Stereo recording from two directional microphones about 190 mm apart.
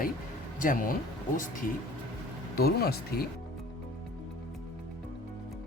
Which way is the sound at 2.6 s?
55° left (ahead or behind).